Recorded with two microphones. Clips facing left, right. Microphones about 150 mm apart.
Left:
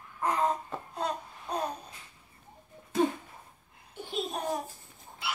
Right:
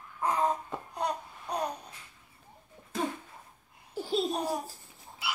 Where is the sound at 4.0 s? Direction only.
35° right (ahead or behind).